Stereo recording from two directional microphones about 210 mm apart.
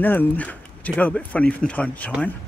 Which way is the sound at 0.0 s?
10° left (ahead or behind).